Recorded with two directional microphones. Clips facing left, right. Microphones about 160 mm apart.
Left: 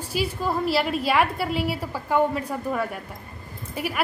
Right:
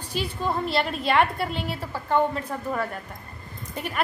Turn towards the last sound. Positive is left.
turn(degrees=5)  # may be behind; listen again after turning